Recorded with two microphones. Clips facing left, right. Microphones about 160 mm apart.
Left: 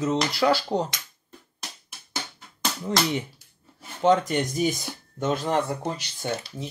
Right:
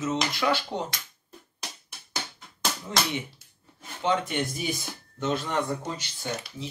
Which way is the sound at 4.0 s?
40° left (ahead or behind).